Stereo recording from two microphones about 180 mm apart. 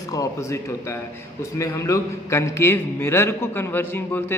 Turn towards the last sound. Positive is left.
turn(degrees=10)  # may be behind; listen again after turning